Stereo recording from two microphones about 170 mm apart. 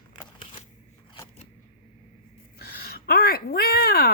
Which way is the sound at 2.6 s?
65° left (ahead or behind).